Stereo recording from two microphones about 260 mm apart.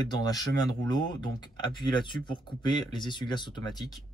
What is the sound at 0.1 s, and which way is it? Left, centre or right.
Speech, centre.